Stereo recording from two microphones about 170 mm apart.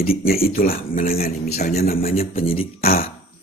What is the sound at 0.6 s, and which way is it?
Speech, 55° left (ahead or behind).